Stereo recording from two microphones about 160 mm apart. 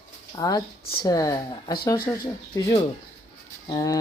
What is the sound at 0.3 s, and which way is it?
Speech, 25° left (ahead or behind).